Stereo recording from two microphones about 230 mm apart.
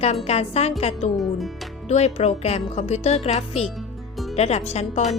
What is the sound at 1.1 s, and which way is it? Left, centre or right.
Speech, centre.